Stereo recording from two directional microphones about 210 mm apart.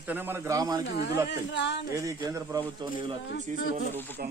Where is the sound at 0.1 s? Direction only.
10° right (ahead or behind).